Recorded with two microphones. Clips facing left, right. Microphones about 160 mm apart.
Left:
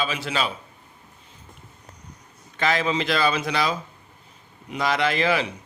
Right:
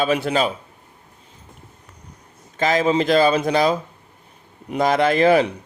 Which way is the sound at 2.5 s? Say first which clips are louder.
Right 5 dB; 40° right (ahead or behind).